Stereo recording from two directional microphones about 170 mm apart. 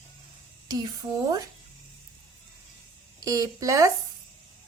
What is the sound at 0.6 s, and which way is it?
Speech, 20° right (ahead or behind).